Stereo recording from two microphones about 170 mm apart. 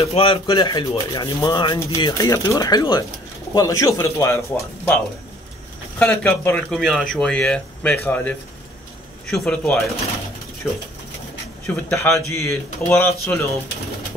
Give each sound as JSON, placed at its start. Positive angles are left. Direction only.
{"t": 0.1, "sound": "speech", "side_deg": 30}
{"t": 5.9, "sound": "speech", "side_deg": 10}